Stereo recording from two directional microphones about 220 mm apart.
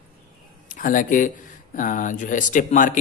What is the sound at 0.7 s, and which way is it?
A man's voice, 35° left (ahead or behind).